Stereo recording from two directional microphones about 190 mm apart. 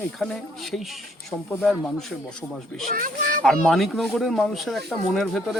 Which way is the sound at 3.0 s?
45° right (ahead or behind).